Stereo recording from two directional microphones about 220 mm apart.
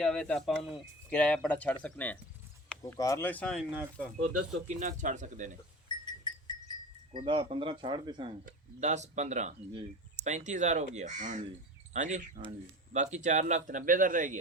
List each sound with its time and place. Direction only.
0.0 s speech: 5° left (ahead or behind)
4.8 s speech: 35° right (ahead or behind)
6.1 s a sound: 20° left (ahead or behind)
7.1 s speech: 20° right (ahead or behind)
8.4 s speech: 35° right (ahead or behind)